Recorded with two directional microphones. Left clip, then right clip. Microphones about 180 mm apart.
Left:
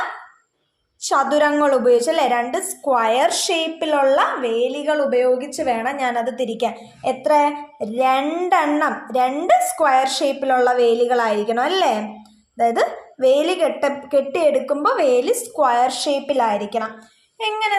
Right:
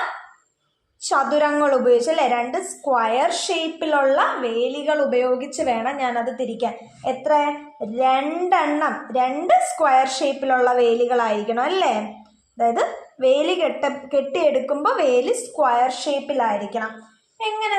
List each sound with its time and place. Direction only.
1.0 s a woman's voice: 25° left (ahead or behind)
17.3 s child singing: 30° left (ahead or behind)